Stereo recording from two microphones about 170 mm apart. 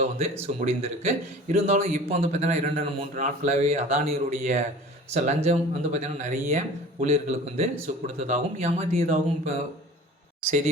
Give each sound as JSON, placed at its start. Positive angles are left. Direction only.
{"t": 0.4, "sound": "a man's voice", "side_deg": -40}